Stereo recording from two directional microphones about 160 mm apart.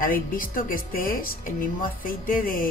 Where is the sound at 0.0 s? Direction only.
60° left (ahead or behind).